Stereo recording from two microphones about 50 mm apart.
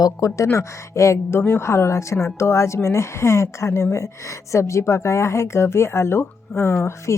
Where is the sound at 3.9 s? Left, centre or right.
Left.